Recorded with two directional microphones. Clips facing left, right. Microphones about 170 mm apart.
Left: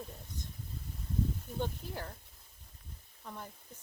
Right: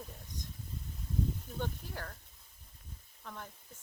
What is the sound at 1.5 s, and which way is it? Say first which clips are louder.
Speech: left 2 dB; 15° left (ahead or behind).